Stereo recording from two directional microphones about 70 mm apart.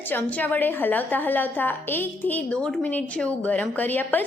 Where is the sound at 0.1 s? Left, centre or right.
Left.